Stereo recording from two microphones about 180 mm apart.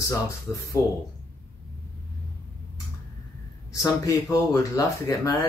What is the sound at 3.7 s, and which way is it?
Speech, 20° left (ahead or behind).